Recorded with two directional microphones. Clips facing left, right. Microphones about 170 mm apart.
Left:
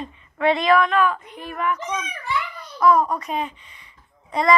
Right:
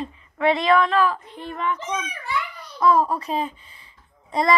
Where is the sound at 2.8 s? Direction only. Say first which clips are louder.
Left 1 dB; 30° right (ahead or behind).